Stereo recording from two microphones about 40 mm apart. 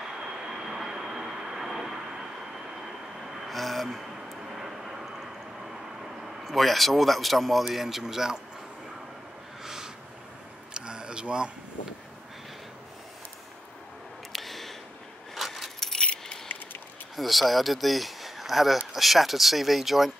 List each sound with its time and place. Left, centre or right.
0.2 s vehicle: centre
3.3 s vehicle: centre
7.7 s speech: centre
10.7 s a sound: right
14.3 s a sound: centre
15.3 s keys jangling: centre
16.0 s keys jangling: left
17.1 s speech: centre